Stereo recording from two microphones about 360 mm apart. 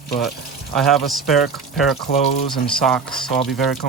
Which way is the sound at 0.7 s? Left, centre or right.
Centre.